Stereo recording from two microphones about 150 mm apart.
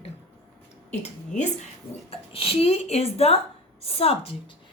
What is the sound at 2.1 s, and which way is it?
Speech, 40° left (ahead or behind).